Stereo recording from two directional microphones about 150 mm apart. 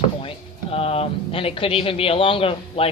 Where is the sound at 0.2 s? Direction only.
40° left (ahead or behind).